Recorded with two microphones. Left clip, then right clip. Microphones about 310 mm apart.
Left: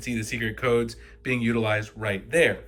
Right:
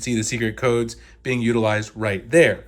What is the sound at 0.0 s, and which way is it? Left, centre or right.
Speech, centre.